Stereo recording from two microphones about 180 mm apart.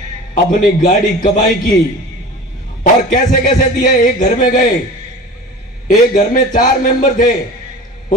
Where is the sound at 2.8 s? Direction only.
50° left (ahead or behind).